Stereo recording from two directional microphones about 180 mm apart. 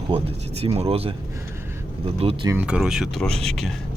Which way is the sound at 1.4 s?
15° right (ahead or behind).